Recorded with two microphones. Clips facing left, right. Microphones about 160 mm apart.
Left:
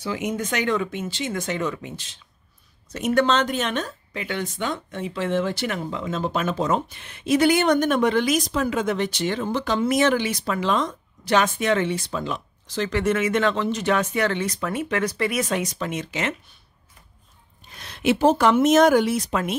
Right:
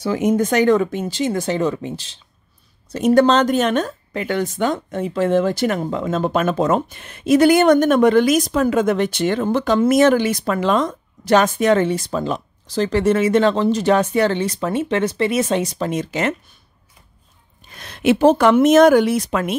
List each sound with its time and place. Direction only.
0.0 s speech: 40° right (ahead or behind)
17.6 s speech: 55° right (ahead or behind)